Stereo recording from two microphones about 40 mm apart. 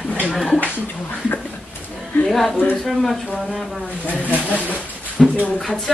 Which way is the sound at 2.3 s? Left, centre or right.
Centre.